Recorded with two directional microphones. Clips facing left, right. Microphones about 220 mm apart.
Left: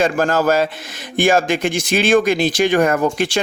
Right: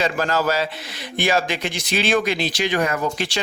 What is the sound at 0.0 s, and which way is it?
A man's voice, 50° left (ahead or behind).